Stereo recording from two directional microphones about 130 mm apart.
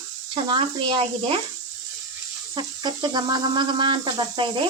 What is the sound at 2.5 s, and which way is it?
Speech, 35° right (ahead or behind).